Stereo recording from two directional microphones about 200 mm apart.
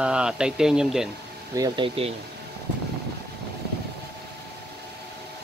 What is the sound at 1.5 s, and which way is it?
Speech, 20° right (ahead or behind).